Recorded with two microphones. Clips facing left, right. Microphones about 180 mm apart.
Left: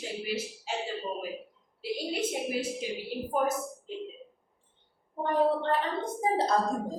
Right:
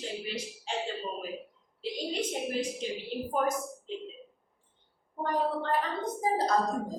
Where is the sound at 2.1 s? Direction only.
10° left (ahead or behind).